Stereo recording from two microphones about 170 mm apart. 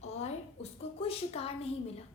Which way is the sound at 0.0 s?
40° left (ahead or behind).